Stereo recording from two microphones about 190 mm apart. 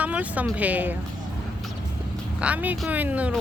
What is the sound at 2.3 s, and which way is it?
Speech, 5° right (ahead or behind).